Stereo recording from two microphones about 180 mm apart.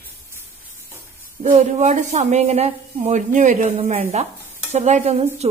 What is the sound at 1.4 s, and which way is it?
Speech, 40° right (ahead or behind).